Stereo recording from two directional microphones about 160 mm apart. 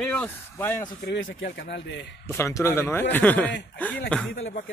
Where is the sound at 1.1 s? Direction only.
90° left.